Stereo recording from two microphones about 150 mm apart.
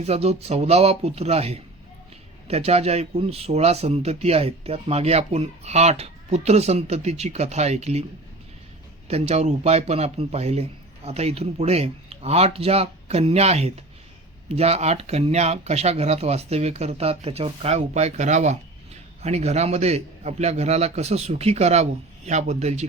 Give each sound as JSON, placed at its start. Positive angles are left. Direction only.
{"t": 0.0, "sound": "speech", "side_deg": -45}
{"t": 9.0, "sound": "speech", "side_deg": -45}